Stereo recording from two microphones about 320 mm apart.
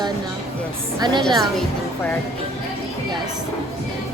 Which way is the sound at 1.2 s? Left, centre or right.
Centre.